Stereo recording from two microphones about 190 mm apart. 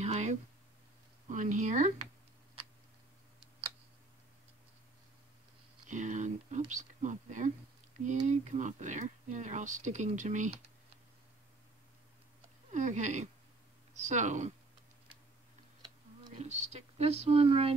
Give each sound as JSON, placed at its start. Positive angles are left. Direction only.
{"t": 0.0, "sound": "a sound", "side_deg": -35}
{"t": 1.3, "sound": "speech", "side_deg": -40}
{"t": 5.9, "sound": "a sound", "side_deg": -40}
{"t": 6.7, "sound": "speech", "side_deg": -40}
{"t": 12.7, "sound": "speech", "side_deg": -40}
{"t": 16.3, "sound": "speech", "side_deg": -35}